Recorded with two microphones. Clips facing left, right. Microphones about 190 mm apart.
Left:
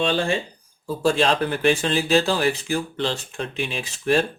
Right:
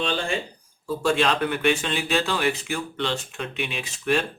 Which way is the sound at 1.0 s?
35° left (ahead or behind).